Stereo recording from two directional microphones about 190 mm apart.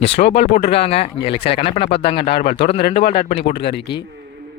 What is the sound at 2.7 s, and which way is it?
Speech, 30° left (ahead or behind).